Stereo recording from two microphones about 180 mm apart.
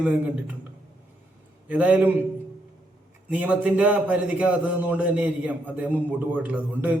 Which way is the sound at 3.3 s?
10° right (ahead or behind).